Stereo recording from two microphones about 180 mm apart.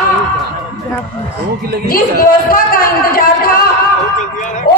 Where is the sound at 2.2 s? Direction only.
55° left (ahead or behind).